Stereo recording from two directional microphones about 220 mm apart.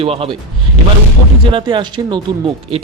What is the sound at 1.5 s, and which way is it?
Speech, 20° right (ahead or behind).